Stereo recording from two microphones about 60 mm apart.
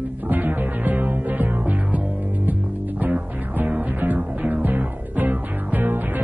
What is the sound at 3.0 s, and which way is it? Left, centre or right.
Music, right.